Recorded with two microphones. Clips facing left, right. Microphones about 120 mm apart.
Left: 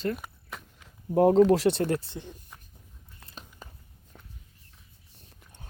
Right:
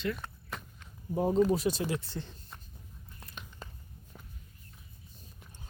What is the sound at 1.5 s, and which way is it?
Speech, 80° left.